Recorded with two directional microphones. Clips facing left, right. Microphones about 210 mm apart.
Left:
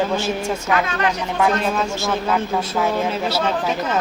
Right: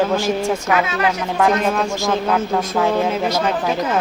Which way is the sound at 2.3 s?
Centre (ahead or behind).